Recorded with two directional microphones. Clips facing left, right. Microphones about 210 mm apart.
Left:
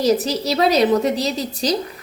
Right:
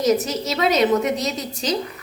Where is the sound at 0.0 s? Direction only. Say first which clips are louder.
Left 2 dB; 35° left (ahead or behind).